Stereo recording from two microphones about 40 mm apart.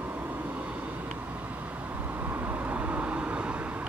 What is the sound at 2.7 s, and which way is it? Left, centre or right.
Vehicle, right.